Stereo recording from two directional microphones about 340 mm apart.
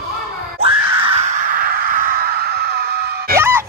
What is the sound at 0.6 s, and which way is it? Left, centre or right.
Screaming, centre.